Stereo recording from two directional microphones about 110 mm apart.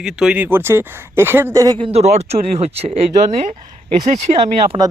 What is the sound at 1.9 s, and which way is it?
Speech, 70° right (ahead or behind).